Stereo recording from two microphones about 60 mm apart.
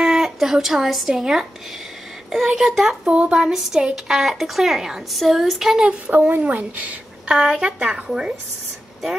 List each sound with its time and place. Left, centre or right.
0.0 s speech: centre
3.1 s speech: centre
6.0 s speech: right
7.3 s speech: centre